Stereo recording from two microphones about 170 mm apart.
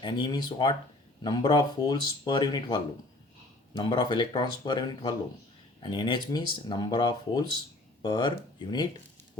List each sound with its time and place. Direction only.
0.0 s speech: 25° left (ahead or behind)